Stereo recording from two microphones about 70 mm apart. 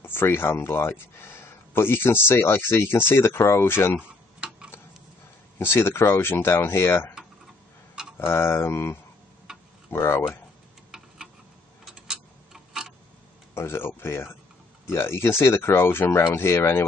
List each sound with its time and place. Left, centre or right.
0.0 s speech: left
5.6 s speech: left
8.0 s tick-tock: centre
8.3 s speech: left
11.8 s tick-tock: centre
13.6 s speech: left